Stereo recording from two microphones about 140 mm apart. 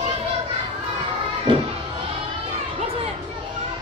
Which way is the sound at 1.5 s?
35° right (ahead or behind).